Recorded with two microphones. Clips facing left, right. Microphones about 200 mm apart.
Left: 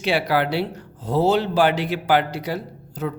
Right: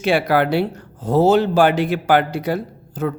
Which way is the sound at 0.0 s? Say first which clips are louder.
Right 4 dB; 50° right (ahead or behind).